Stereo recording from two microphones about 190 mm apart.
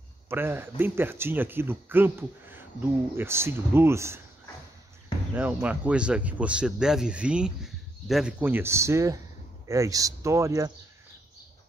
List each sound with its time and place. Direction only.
0.3 s speech: 10° right (ahead or behind)
5.3 s speech: 10° right (ahead or behind)